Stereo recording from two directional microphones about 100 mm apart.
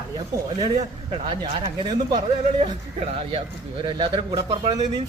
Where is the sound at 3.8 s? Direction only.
50° right (ahead or behind).